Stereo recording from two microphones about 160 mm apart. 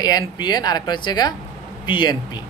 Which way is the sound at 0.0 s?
25° left (ahead or behind).